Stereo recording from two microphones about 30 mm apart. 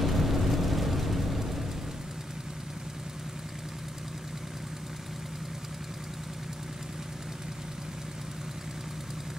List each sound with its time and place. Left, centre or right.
0.0 s vehicle: centre